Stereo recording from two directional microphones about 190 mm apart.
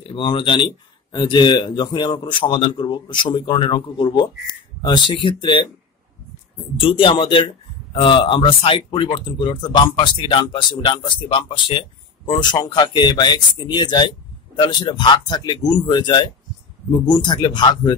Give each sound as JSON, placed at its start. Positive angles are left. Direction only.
{"t": 0.1, "sound": "a man's voice", "side_deg": 25}
{"t": 6.8, "sound": "a man's voice", "side_deg": 25}